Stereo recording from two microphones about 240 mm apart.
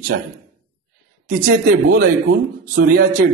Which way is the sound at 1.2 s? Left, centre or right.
Right.